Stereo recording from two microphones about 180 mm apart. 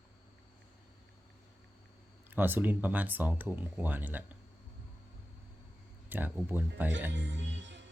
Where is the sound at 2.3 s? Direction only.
10° right (ahead or behind).